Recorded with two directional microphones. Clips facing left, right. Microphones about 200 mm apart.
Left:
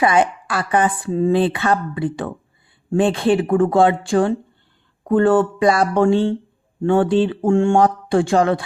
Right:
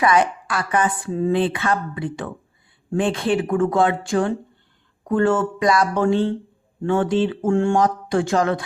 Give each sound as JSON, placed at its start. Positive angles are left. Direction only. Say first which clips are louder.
{"t": 0.0, "sound": "speech", "louder": "left 2 dB", "side_deg": 30}